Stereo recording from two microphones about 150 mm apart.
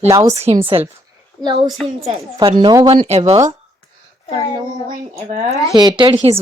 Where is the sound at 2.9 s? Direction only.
40° right (ahead or behind).